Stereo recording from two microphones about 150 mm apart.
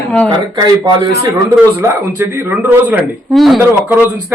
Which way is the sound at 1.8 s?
15° right (ahead or behind).